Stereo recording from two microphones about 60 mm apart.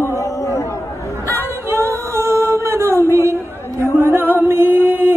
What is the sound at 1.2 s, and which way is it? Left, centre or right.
Singing, right.